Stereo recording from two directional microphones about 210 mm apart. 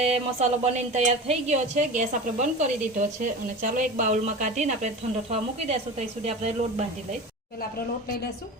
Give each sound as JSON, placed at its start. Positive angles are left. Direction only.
{"t": 0.0, "sound": "speech", "side_deg": -30}
{"t": 6.2, "sound": "speech", "side_deg": -30}